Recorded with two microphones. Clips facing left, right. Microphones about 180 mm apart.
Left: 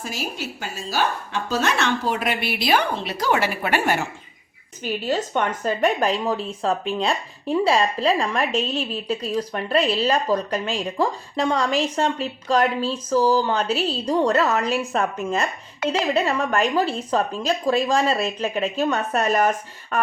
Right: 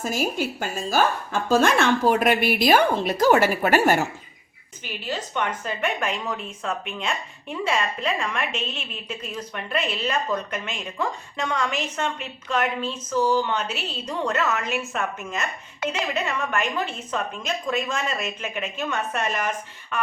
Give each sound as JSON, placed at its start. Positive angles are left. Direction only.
{"t": 0.0, "sound": "speech", "side_deg": -50}
{"t": 4.8, "sound": "speech", "side_deg": 40}